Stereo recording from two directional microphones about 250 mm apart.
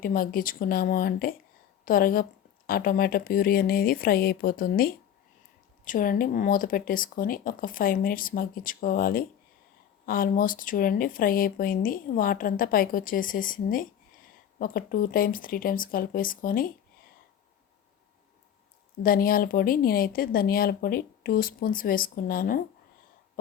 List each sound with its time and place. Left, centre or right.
0.0 s a woman's voice: left
19.0 s speech: left